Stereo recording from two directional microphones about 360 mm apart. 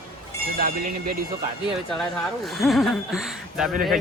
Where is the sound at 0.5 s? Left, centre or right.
Right.